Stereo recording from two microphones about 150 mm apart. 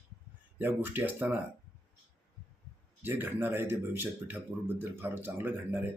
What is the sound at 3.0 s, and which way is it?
Speech, 15° right (ahead or behind).